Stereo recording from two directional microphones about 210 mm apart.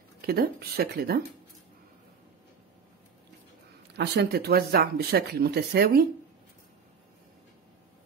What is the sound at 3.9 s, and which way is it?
Speech, 50° right (ahead or behind).